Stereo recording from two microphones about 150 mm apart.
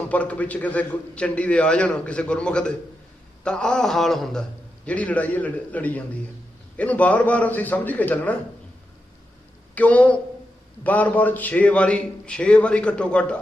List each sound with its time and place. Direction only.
0.1 s a man's voice: 10° left (ahead or behind)
9.7 s a man's voice: 10° left (ahead or behind)